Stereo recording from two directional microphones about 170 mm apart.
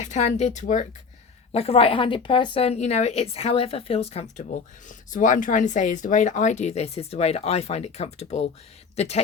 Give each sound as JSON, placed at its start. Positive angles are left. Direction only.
{"t": 0.0, "sound": "speech", "side_deg": 40}
{"t": 1.5, "sound": "speech", "side_deg": 35}